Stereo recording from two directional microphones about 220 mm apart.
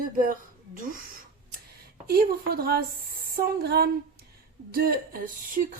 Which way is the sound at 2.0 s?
45° right (ahead or behind).